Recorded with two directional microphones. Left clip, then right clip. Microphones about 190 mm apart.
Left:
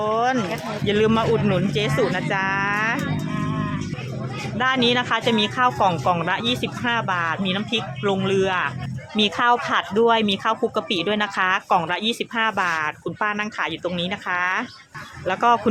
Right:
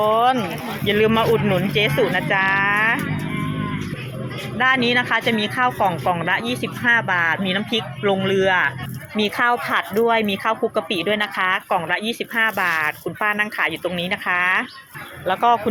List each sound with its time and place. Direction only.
0.0 s boat: 5° left (ahead or behind)
0.9 s speech: 10° left (ahead or behind)
4.5 s speech: 5° left (ahead or behind)
9.2 s speech: 10° left (ahead or behind)
15.3 s speech: 20° left (ahead or behind)